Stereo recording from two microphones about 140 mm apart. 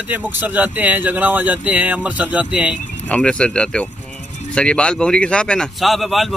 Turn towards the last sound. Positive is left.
turn(degrees=0)  # may be behind; listen again after turning